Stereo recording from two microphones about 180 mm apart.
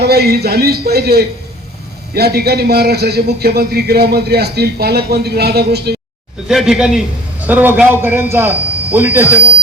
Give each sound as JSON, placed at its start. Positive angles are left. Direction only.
{"t": 0.0, "sound": "a man's voice", "side_deg": -60}
{"t": 6.5, "sound": "a man's voice", "side_deg": 0}